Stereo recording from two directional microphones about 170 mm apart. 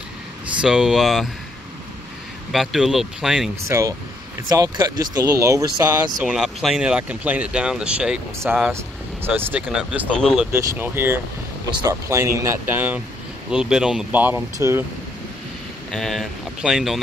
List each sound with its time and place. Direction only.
0.6 s speech: 5° right (ahead or behind)
2.5 s speech: centre (ahead or behind)
3.6 s speech: 15° right (ahead or behind)
6.2 s speech: centre (ahead or behind)
15.9 s speech: centre (ahead or behind)